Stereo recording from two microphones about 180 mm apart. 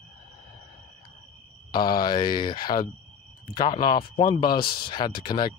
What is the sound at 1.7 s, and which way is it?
Speech, 25° left (ahead or behind).